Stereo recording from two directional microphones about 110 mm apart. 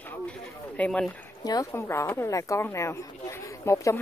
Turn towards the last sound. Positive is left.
turn(degrees=25)  # may be behind; listen again after turning